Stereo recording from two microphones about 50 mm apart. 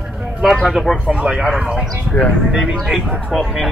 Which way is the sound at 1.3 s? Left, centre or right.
Centre.